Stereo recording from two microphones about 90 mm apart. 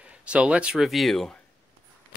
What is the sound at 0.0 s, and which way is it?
Speech, 15° right (ahead or behind).